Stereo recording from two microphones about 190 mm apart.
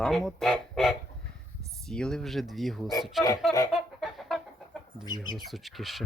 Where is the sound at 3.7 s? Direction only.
Centre (ahead or behind).